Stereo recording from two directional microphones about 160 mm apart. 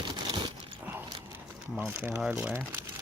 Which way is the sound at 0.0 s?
30° right (ahead or behind).